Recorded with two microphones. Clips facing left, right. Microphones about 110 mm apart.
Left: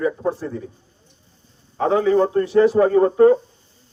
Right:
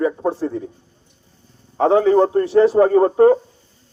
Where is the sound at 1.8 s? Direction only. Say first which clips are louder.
Right 3 dB; 25° right (ahead or behind).